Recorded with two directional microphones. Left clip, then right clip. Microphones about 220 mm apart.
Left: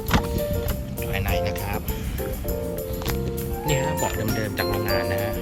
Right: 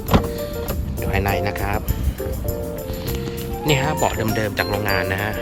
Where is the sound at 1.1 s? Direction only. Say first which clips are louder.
Right 5 dB; 20° right (ahead or behind).